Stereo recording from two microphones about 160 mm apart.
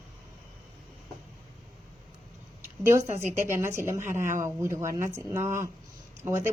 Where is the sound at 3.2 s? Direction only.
45° right (ahead or behind).